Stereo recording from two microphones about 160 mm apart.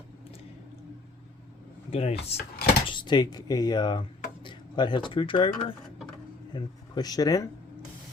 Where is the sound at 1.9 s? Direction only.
40° left (ahead or behind).